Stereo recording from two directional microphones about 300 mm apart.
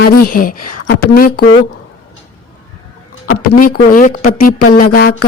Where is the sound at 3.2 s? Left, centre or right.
Left.